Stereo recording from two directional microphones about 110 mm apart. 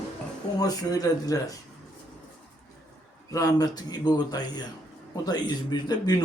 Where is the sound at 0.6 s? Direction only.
35° left (ahead or behind).